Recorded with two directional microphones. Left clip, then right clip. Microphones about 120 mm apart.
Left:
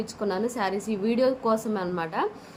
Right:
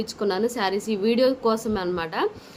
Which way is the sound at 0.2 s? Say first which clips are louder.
Right 3 dB; 20° right (ahead or behind).